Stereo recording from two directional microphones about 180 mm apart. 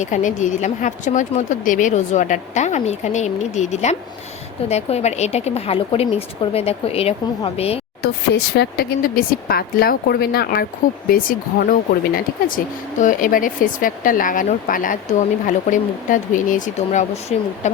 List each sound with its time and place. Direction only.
0.0 s a woman's voice: 45° left (ahead or behind)
8.0 s speech: 65° left (ahead or behind); by 17.7 s 40° left (ahead or behind)